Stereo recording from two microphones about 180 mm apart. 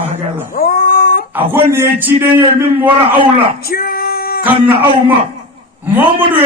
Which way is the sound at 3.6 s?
55° left (ahead or behind).